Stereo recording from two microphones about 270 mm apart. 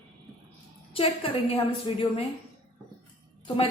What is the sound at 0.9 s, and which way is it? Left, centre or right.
A woman's voice, centre.